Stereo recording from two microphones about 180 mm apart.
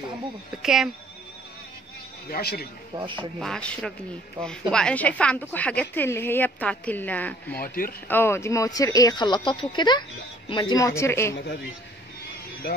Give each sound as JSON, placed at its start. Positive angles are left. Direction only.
{"t": 0.6, "sound": "speech", "side_deg": 0}
{"t": 2.2, "sound": "speech", "side_deg": 55}
{"t": 3.0, "sound": "speech", "side_deg": -25}
{"t": 3.3, "sound": "speech", "side_deg": 5}
{"t": 7.6, "sound": "speech", "side_deg": 50}
{"t": 8.1, "sound": "speech", "side_deg": 15}
{"t": 12.6, "sound": "speech", "side_deg": 60}